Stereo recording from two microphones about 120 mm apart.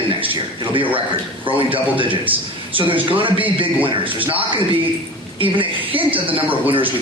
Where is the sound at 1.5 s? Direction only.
45° right (ahead or behind).